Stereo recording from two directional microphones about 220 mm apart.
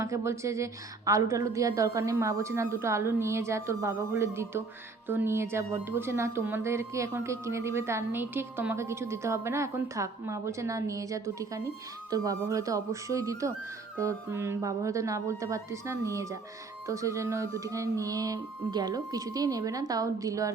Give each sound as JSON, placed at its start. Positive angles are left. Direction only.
{"t": 0.0, "sound": "speech", "side_deg": -15}